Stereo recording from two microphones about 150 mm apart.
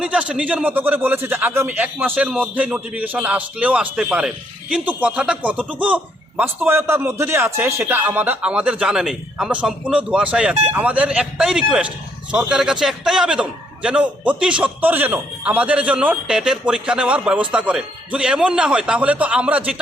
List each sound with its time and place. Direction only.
0.0 s a man's voice: 5° right (ahead or behind)